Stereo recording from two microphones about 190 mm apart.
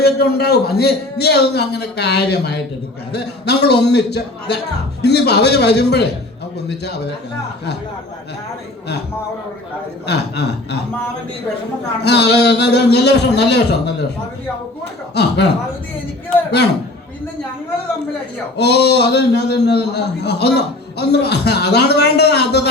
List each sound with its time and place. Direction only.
0.0 s a man's voice: 55° left (ahead or behind)
10.1 s a man's voice: 60° left (ahead or behind)
12.0 s a man's voice: 60° left (ahead or behind)
15.1 s a man's voice: 60° left (ahead or behind)
18.5 s a man's voice: 60° left (ahead or behind)